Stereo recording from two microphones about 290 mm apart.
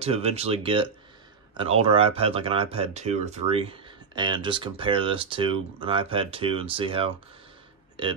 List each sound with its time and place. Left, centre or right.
0.0 s speech: right